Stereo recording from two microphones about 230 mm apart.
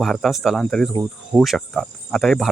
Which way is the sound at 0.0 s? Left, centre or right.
Centre.